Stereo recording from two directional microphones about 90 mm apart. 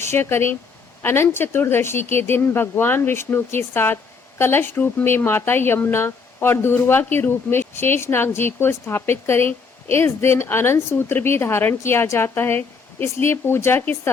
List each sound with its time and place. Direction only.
0.0 s speech: 25° left (ahead or behind)